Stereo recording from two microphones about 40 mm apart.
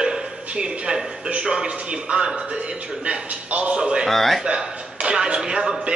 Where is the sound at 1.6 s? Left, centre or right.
Right.